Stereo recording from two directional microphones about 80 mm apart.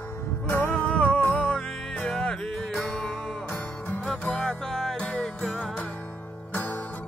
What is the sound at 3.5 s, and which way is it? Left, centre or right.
Music, left.